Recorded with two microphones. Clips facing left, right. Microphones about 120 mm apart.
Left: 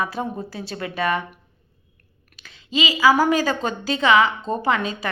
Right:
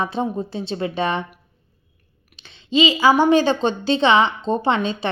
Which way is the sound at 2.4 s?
30° right (ahead or behind).